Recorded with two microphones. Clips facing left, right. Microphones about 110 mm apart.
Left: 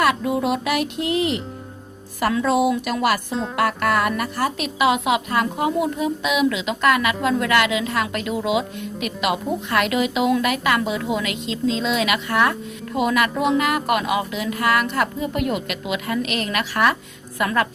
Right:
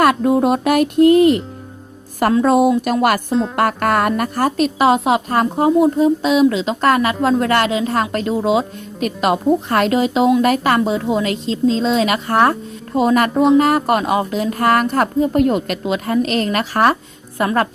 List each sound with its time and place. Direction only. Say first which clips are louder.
0.0 s a woman's voice: right 6 dB; 50° right (ahead or behind); by 17.7 s 35° right (ahead or behind)